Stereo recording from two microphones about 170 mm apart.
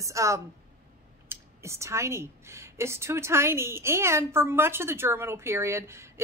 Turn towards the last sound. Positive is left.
turn(degrees=-15)  # may be behind; listen again after turning